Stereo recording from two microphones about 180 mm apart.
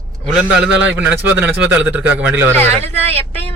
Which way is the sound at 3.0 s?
35° right (ahead or behind).